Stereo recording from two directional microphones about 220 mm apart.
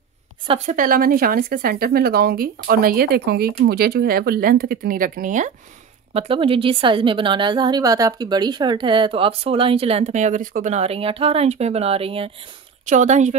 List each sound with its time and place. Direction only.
0.7 s speech: 40° right (ahead or behind)
6.1 s a woman's voice: 25° right (ahead or behind)